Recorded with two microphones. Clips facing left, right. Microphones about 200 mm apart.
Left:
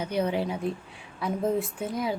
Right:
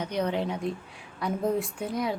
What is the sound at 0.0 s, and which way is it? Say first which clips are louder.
A woman's voice: left 1 dB; 5° left (ahead or behind).